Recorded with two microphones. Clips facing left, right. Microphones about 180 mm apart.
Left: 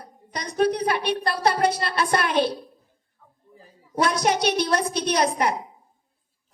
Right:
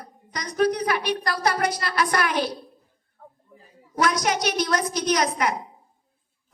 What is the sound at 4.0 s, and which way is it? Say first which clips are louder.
A child's voice: left 1 dB; 30° left (ahead or behind).